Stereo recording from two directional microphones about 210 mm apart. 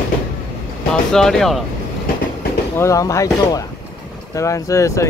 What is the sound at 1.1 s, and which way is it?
Speech, centre (ahead or behind).